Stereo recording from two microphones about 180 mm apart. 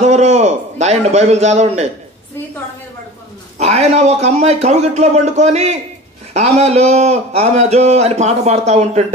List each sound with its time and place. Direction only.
0.0 s a man's voice: 40° right (ahead or behind)
3.5 s a man's voice: 40° right (ahead or behind)